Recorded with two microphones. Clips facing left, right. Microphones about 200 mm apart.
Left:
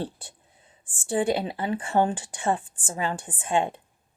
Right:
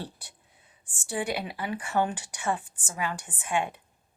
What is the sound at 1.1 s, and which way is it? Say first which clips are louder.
Speech: left 7 dB; 25° left (ahead or behind).